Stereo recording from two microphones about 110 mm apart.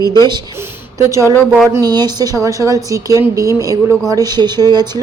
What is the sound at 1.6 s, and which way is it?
Speech, 35° right (ahead or behind).